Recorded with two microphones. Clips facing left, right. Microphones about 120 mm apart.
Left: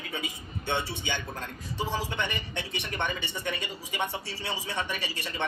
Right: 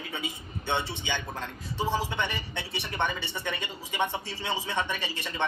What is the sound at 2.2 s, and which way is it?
A man's voice, 50° left (ahead or behind).